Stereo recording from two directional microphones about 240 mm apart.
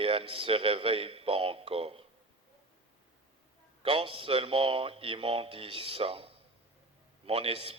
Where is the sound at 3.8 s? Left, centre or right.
Right.